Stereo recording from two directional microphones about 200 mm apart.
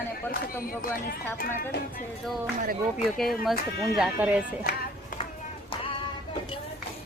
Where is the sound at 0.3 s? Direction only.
45° left (ahead or behind).